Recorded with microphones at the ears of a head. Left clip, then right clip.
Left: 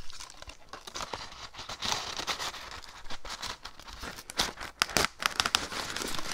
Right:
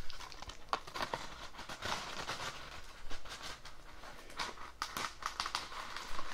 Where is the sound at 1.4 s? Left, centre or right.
Left.